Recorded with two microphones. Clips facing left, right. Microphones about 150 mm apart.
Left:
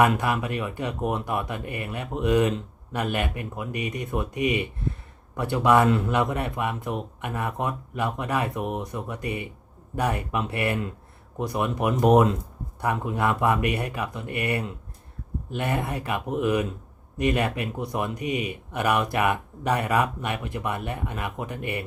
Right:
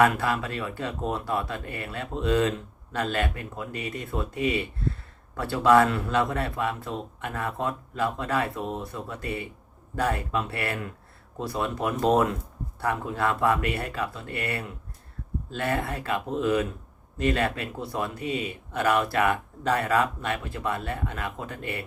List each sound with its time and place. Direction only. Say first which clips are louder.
0.0 s speech: left 1 dB; 15° left (ahead or behind)